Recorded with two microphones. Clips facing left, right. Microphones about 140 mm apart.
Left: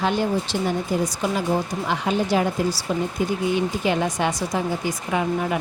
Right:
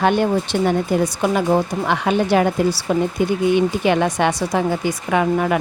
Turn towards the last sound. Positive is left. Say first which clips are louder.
# right 5 dB
turn(degrees=-70)  # may be behind; listen again after turning